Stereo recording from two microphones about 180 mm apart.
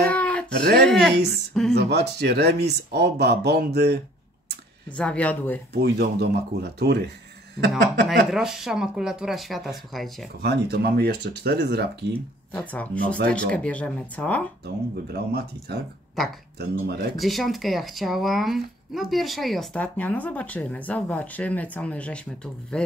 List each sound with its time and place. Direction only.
0.0 s a sound: 10° left (ahead or behind)
1.3 s speech: 5° left (ahead or behind)
1.8 s speech: 65° right (ahead or behind)
4.8 s speech: 5° left (ahead or behind)
5.7 s speech: 65° right (ahead or behind)
8.3 s speech: centre (ahead or behind)
10.4 s speech: 60° right (ahead or behind)
12.5 s speech: 10° left (ahead or behind)
15.1 s speech: 65° right (ahead or behind)
17.2 s speech: centre (ahead or behind)